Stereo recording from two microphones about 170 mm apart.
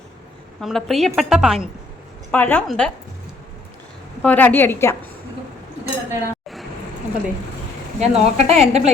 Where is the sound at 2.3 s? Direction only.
10° left (ahead or behind).